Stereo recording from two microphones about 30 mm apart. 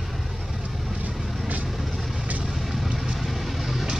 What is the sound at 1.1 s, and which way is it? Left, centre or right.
Vehicle, centre.